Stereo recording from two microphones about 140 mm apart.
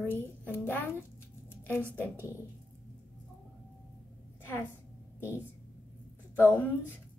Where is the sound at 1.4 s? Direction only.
15° left (ahead or behind).